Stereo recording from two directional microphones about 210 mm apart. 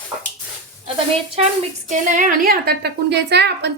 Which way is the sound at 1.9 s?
35° right (ahead or behind).